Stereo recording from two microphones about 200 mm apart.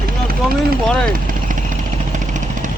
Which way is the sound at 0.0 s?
50° right (ahead or behind).